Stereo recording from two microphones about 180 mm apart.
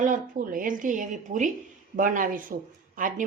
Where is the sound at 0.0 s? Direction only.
45° right (ahead or behind).